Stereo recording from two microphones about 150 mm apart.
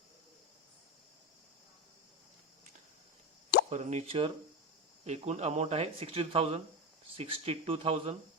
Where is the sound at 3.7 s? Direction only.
50° right (ahead or behind).